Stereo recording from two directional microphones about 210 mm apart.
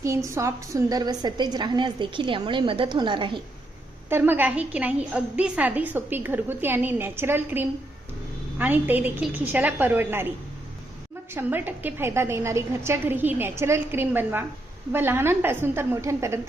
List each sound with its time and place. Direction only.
0.3 s a woman's voice: 15° right (ahead or behind)
4.1 s a woman's voice: 10° right (ahead or behind)
11.3 s a woman's voice: 10° right (ahead or behind)